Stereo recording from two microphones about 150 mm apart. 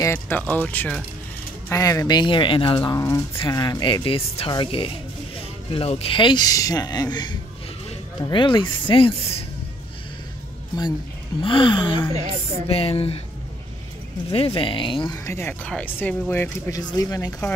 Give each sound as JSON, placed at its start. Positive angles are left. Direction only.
{"t": 0.0, "sound": "speech", "side_deg": 15}
{"t": 1.7, "sound": "speech", "side_deg": 20}
{"t": 11.4, "sound": "speech", "side_deg": 35}
{"t": 14.3, "sound": "speech", "side_deg": 35}
{"t": 15.2, "sound": "speech", "side_deg": 15}